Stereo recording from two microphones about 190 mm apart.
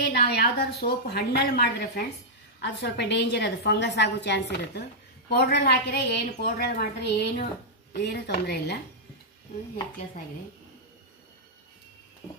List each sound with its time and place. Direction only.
0.1 s a woman's voice: 55° left (ahead or behind)